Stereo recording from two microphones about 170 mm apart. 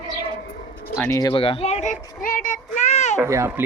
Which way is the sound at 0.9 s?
15° left (ahead or behind).